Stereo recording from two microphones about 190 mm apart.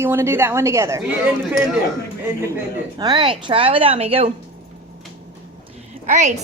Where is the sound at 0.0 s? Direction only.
10° right (ahead or behind).